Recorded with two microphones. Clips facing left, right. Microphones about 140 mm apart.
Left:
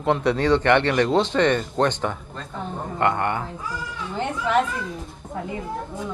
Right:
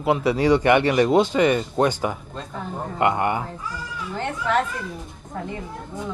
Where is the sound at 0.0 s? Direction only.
5° right (ahead or behind).